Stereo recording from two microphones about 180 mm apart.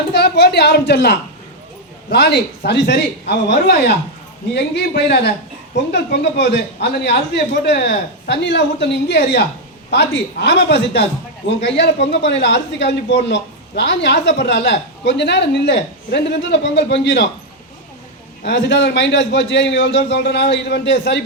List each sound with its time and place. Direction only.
0.1 s a man's voice: 65° left (ahead or behind)
18.4 s a man's voice: 80° left